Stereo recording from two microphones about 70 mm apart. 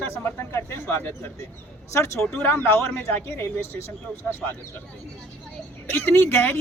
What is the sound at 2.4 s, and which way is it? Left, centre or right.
A man's voice, left.